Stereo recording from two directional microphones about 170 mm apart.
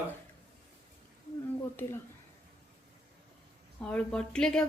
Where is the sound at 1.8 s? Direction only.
10° left (ahead or behind).